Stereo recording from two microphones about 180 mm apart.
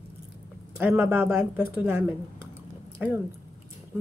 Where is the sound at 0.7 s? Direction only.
15° right (ahead or behind).